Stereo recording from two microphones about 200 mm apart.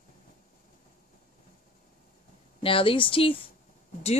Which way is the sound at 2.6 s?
25° left (ahead or behind).